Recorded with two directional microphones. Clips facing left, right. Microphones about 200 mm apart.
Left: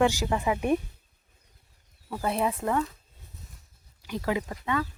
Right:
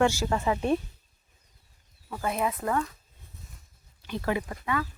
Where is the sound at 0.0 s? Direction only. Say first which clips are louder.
Even; 15° left (ahead or behind).